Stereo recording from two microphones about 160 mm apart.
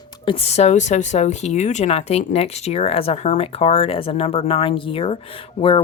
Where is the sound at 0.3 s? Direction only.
40° left (ahead or behind).